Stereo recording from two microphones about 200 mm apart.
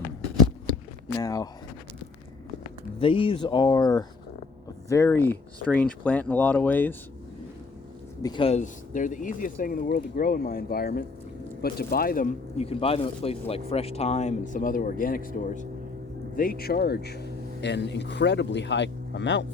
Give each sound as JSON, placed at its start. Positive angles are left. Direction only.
{"t": 1.0, "sound": "speech", "side_deg": 15}
{"t": 3.0, "sound": "speech", "side_deg": 25}
{"t": 8.2, "sound": "speech", "side_deg": 25}